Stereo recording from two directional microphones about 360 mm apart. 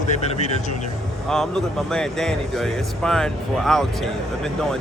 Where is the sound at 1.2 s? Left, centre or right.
Centre.